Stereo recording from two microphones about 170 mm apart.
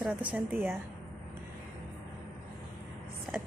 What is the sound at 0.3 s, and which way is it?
Speech, centre (ahead or behind).